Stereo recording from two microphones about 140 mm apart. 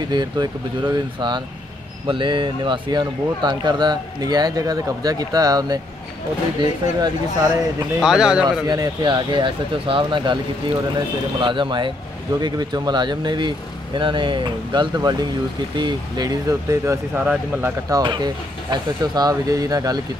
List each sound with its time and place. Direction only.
0.1 s speech: 30° right (ahead or behind)
8.0 s a man's voice: 5° right (ahead or behind)
8.6 s speech: 30° right (ahead or behind)
11.4 s speech: 35° right (ahead or behind); by 17.7 s 15° right (ahead or behind)
17.8 s speech: 30° right (ahead or behind)